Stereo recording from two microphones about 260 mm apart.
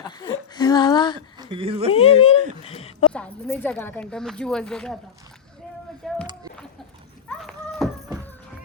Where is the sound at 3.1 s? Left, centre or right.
Centre.